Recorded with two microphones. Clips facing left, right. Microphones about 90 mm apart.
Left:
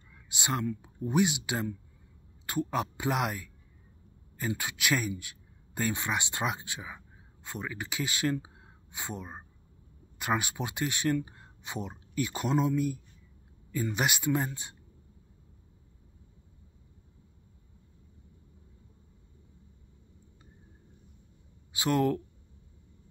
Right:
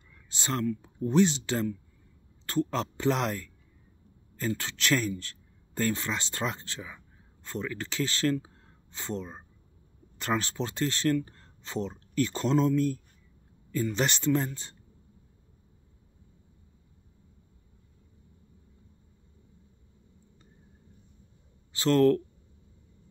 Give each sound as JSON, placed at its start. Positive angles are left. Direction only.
{"t": 0.1, "sound": "speech", "side_deg": 15}
{"t": 21.7, "sound": "speech", "side_deg": 15}